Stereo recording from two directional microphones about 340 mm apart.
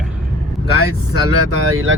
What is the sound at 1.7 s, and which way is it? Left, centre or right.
Speech, right.